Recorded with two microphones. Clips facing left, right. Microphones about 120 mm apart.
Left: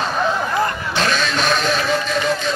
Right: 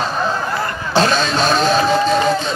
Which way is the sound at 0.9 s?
35° right (ahead or behind).